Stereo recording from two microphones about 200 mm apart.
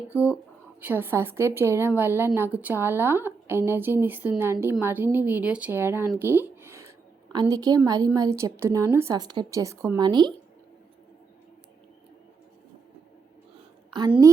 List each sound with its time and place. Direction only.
0.1 s a woman's voice: 10° right (ahead or behind)
6.1 s a sound: 10° right (ahead or behind)
7.3 s a woman's voice: 20° right (ahead or behind)
13.9 s a woman's voice: 20° right (ahead or behind)